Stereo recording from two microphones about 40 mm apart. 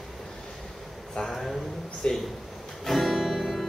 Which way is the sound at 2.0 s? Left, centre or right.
Left.